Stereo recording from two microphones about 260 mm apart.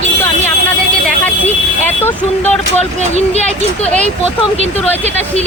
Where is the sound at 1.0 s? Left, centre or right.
Centre.